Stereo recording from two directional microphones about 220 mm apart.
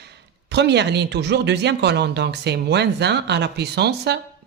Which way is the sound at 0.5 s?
50° right (ahead or behind).